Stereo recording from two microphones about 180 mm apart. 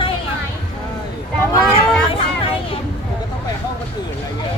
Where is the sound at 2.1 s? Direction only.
30° left (ahead or behind).